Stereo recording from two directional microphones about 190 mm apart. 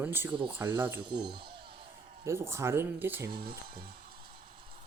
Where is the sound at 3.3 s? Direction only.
55° right (ahead or behind).